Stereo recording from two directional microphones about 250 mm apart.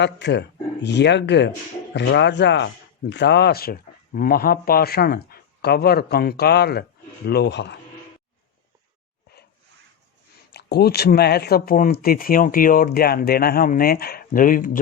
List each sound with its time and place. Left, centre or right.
0.0 s speech: left
10.5 s speech: left